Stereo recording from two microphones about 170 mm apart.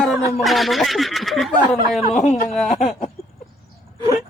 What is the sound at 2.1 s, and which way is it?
Speech, 45° left (ahead or behind).